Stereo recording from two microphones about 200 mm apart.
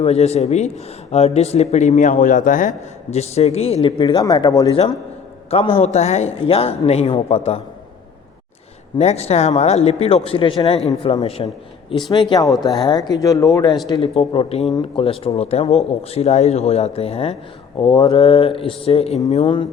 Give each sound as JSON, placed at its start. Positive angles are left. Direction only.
{"t": 0.0, "sound": "a man's voice", "side_deg": 30}
{"t": 9.0, "sound": "a man's voice", "side_deg": 30}